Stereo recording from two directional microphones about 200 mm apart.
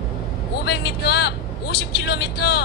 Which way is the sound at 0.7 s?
55° left (ahead or behind).